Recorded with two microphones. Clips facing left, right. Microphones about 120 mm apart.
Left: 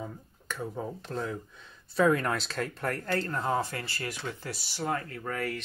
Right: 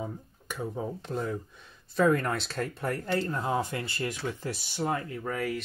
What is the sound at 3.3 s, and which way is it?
Speech, 20° right (ahead or behind).